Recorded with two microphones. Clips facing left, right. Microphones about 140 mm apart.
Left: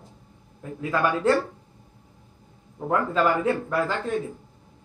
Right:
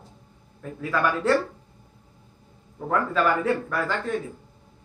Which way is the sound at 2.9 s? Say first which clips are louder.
Left 1 dB; 20° left (ahead or behind).